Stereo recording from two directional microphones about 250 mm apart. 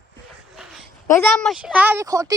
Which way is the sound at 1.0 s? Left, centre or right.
Centre.